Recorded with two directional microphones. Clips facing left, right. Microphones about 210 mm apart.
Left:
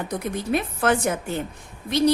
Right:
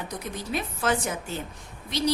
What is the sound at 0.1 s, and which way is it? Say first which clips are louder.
A woman's voice: left 9 dB; 55° left (ahead or behind).